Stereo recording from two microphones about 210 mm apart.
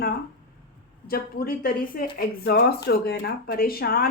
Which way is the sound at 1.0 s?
45° left (ahead or behind).